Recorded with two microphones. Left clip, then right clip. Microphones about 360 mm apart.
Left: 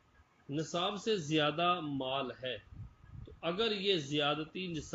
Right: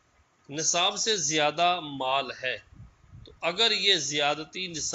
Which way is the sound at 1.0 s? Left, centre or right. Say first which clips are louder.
Right 7 dB; centre.